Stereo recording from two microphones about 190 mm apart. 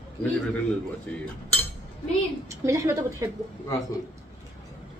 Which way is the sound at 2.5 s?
15° right (ahead or behind).